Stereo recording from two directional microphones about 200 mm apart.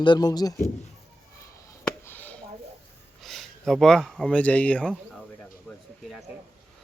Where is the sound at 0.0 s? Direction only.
20° left (ahead or behind).